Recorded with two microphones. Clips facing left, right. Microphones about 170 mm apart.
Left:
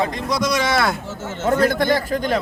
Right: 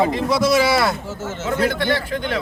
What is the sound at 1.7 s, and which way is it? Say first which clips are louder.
Speech: left 3 dB; 45° left (ahead or behind).